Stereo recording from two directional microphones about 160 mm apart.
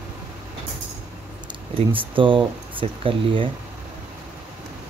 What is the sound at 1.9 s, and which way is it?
Speech, 35° right (ahead or behind).